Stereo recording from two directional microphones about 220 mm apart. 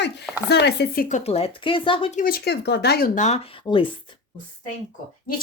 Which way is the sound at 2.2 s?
45° left (ahead or behind).